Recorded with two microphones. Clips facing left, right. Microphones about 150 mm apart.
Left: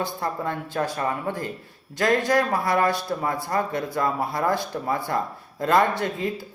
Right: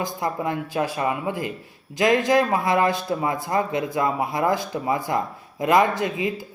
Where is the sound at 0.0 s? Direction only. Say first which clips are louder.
Right 2 dB; 15° right (ahead or behind).